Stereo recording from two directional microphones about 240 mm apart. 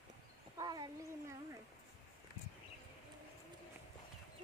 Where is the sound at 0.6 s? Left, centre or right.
Centre.